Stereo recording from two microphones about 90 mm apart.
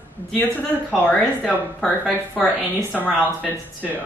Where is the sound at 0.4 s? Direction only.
15° left (ahead or behind).